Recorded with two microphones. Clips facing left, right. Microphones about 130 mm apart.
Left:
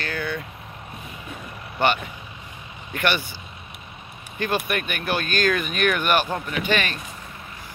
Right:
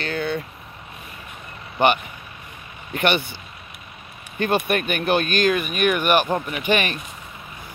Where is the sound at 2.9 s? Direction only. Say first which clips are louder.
Right 3 dB; 20° right (ahead or behind).